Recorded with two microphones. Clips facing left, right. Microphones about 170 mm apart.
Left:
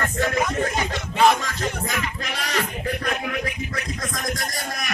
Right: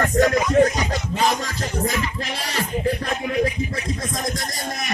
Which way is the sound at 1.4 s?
35° right (ahead or behind).